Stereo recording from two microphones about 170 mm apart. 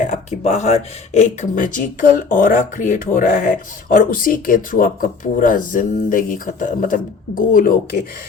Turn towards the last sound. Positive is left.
turn(degrees=55)  # may be behind; listen again after turning